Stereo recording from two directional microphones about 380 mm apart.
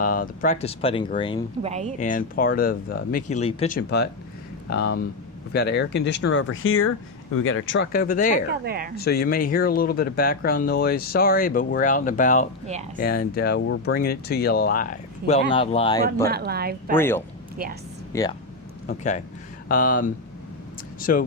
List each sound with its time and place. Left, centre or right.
0.0 s speech: left
1.6 s speech: centre
2.0 s speech: left
8.6 s speech: right
9.0 s speech: left
16.2 s speech: right
16.9 s speech: centre
17.6 s speech: right
18.1 s speech: centre